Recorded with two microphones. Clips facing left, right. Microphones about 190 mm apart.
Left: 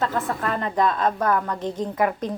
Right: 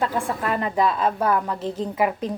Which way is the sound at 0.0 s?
10° right (ahead or behind).